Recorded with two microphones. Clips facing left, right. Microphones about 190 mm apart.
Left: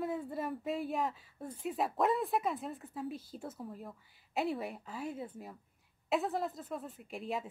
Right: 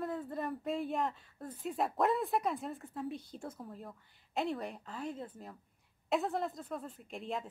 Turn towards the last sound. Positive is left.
turn(degrees=5)  # may be behind; listen again after turning